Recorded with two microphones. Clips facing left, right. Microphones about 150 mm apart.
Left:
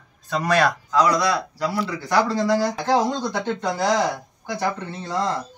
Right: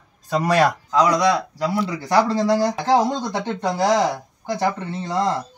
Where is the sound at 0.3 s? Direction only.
10° right (ahead or behind).